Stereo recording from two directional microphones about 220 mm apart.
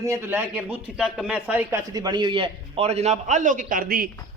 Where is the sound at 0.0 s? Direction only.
10° right (ahead or behind).